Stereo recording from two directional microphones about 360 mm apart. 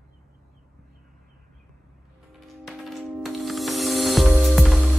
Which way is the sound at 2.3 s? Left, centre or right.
Centre.